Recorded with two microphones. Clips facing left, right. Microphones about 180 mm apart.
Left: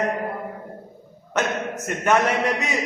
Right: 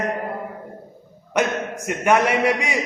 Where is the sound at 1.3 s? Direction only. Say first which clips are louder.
Right 2 dB; 15° right (ahead or behind).